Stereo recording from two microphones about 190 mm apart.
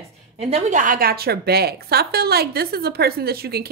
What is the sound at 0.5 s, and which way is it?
A woman's voice, 35° right (ahead or behind).